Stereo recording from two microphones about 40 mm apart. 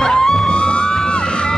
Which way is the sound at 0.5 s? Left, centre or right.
Left.